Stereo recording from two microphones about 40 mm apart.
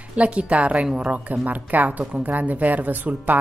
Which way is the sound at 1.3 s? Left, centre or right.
Right.